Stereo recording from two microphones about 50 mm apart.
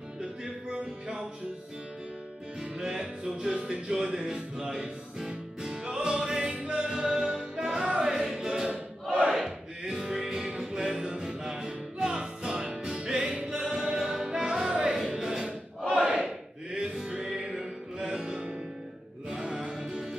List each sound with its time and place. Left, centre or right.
2.8 s music: centre
17.3 s music: centre